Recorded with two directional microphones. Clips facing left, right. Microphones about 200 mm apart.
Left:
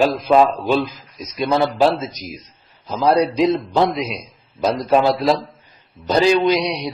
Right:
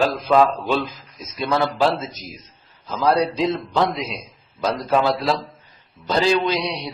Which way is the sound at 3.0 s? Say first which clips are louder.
Left 3 dB; 20° left (ahead or behind).